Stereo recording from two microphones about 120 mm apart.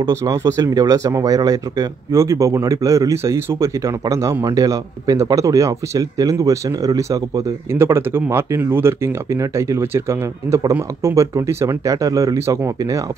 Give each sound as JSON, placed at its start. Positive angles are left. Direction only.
{"t": 0.0, "sound": "speech", "side_deg": -30}